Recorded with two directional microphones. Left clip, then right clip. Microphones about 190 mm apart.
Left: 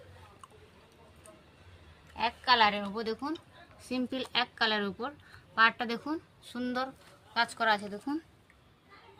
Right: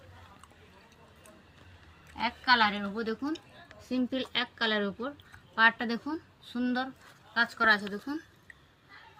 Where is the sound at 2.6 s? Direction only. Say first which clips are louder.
Left 1 dB; 75° left (ahead or behind).